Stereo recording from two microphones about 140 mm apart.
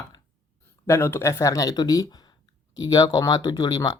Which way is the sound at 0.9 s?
20° left (ahead or behind).